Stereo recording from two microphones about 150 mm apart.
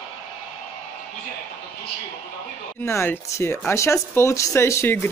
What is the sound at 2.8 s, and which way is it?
Speech, 15° left (ahead or behind).